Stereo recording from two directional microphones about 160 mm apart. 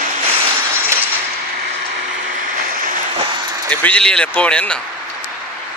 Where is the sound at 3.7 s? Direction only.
10° left (ahead or behind).